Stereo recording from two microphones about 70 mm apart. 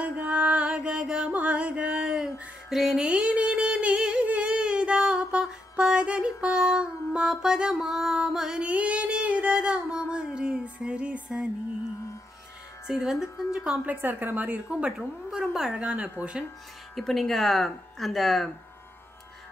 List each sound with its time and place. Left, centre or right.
0.0 s music: centre
3.1 s a sound: centre
12.8 s speech: centre
13.8 s speech: right
14.9 s speech: centre
16.9 s speech: centre